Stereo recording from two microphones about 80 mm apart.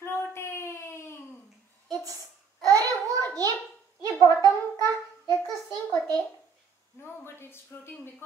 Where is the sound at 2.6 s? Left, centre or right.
Right.